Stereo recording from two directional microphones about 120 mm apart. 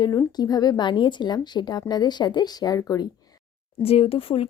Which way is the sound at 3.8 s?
55° left (ahead or behind).